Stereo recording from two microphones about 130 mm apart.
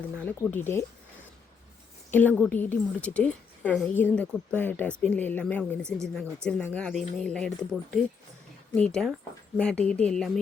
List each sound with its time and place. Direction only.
0.2 s a woman's voice: 10° left (ahead or behind)
2.0 s a woman's voice: 15° left (ahead or behind)